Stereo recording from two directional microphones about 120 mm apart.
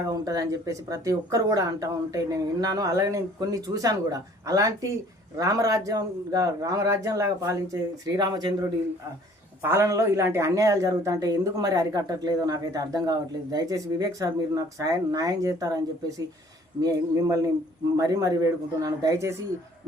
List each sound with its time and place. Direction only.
0.1 s a man's voice: 30° right (ahead or behind)